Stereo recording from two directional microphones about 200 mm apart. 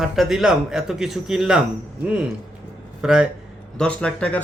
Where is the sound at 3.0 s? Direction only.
5° right (ahead or behind).